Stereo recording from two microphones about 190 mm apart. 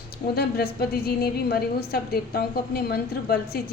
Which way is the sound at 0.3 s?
55° left (ahead or behind).